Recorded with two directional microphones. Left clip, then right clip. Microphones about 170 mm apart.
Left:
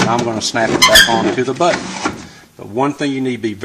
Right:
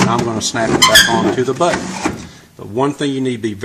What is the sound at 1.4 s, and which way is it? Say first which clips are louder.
Speech: even; 35° left (ahead or behind).